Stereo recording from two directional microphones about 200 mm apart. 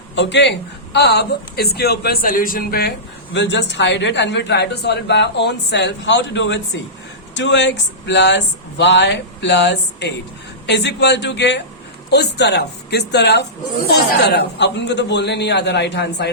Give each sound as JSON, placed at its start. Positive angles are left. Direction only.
{"t": 0.2, "sound": "a woman's voice", "side_deg": 60}
{"t": 3.3, "sound": "a woman's voice", "side_deg": 60}